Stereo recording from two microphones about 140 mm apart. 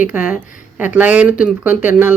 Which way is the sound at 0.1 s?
10° right (ahead or behind).